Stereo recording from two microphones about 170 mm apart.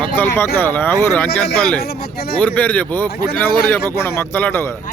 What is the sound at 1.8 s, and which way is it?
Speech, 65° left (ahead or behind).